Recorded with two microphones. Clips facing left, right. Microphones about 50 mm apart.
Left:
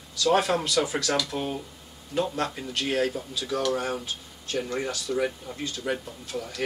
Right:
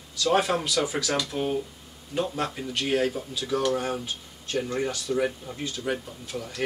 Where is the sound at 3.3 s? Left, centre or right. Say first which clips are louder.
Right 2 dB; right.